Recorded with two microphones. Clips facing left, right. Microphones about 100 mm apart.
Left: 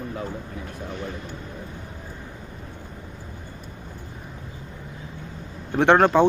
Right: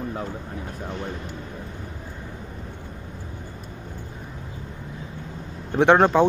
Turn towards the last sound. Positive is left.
turn(degrees=-15)  # may be behind; listen again after turning